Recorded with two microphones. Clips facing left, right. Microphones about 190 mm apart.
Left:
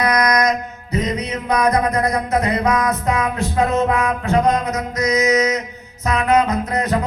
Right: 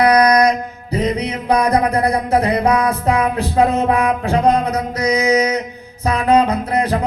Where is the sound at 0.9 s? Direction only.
30° right (ahead or behind).